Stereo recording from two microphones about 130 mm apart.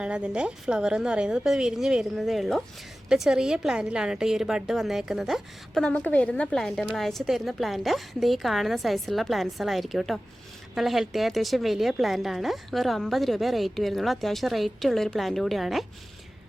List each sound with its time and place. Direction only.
0.0 s a woman's voice: 10° right (ahead or behind)